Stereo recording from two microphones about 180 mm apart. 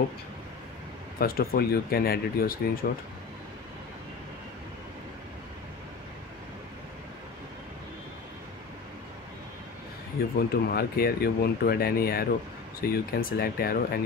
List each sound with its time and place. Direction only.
1.2 s speech: 55° left (ahead or behind)
10.3 s speech: 60° left (ahead or behind)